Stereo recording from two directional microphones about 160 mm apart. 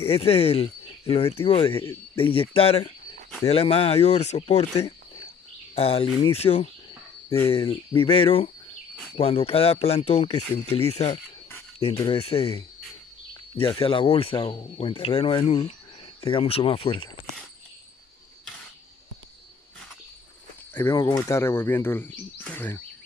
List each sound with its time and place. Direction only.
0.1 s speech: 35° left (ahead or behind)
20.7 s speech: 15° left (ahead or behind)